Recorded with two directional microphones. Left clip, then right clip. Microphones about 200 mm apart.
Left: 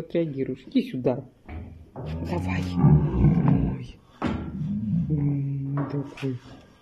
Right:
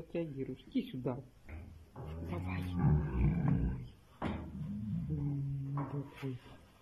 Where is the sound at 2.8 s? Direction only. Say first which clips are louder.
Left 13 dB; 25° left (ahead or behind).